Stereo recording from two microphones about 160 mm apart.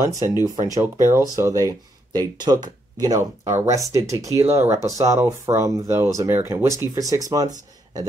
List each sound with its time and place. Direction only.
0.0 s speech: 20° right (ahead or behind)